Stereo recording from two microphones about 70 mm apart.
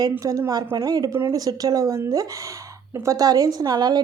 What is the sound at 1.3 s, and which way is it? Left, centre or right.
Speech, right.